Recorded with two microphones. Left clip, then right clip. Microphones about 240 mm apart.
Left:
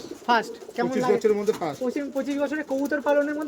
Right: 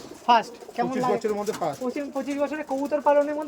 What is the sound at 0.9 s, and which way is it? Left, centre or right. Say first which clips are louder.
Speech: left 5 dB; left.